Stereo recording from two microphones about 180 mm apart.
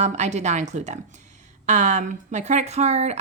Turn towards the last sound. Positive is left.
turn(degrees=-40)  # may be behind; listen again after turning